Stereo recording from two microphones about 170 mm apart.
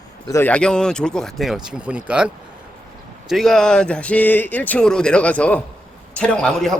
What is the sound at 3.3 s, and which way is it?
A man's voice, centre (ahead or behind).